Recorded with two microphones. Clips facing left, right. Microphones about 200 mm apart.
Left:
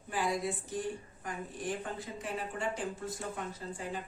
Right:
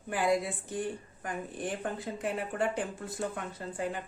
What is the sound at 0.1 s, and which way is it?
Speech, 60° right (ahead or behind).